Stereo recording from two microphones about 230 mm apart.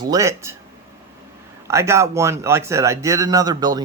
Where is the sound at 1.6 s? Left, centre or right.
Centre.